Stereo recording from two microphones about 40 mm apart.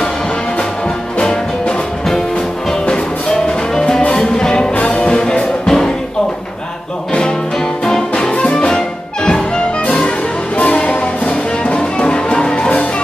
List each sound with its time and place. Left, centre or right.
1.2 s music: left
3.4 s music: centre
8.1 s music: centre
10.6 s music: left